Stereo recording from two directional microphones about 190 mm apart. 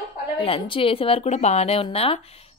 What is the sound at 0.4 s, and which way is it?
Speech, 30° left (ahead or behind).